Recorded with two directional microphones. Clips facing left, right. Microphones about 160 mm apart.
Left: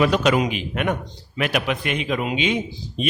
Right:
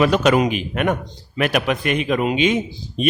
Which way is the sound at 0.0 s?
50° right (ahead or behind).